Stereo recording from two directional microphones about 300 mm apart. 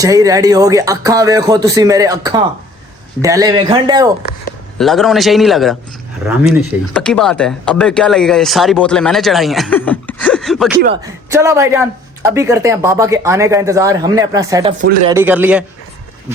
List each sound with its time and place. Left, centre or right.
0.0 s speech: centre
4.8 s speech: centre
6.9 s speech: centre; by 15.1 s right
15.1 s speech: centre